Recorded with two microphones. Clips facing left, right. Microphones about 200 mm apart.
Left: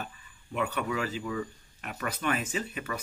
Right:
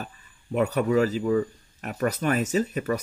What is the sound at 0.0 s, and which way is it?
Speech, 40° right (ahead or behind).